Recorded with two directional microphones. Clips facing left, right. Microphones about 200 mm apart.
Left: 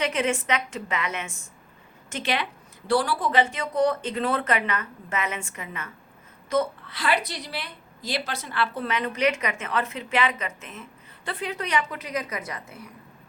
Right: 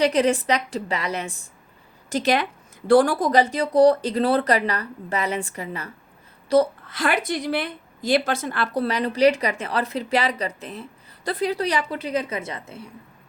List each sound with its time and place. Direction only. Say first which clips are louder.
0.0 s a woman's voice: right 6 dB; 35° right (ahead or behind)